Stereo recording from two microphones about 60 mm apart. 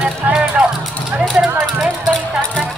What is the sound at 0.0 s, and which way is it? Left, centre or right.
Music, centre.